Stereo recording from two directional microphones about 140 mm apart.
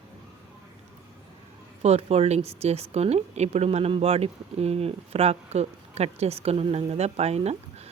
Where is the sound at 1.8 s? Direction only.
45° right (ahead or behind).